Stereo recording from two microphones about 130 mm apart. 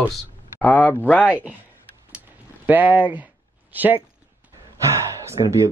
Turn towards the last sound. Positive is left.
turn(degrees=-25)  # may be behind; listen again after turning